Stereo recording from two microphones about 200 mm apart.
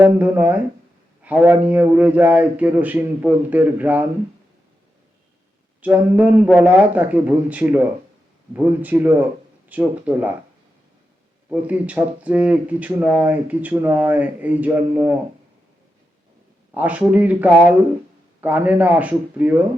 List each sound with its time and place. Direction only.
0.0 s speech: 10° right (ahead or behind)
5.8 s speech: 10° right (ahead or behind)
11.4 s speech: 5° right (ahead or behind)
16.7 s speech: 5° right (ahead or behind)